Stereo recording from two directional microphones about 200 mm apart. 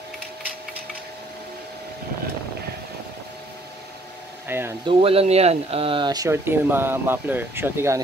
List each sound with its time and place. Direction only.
4.5 s speech: 10° right (ahead or behind)
4.8 s speech: 30° right (ahead or behind); by 8.0 s 10° right (ahead or behind)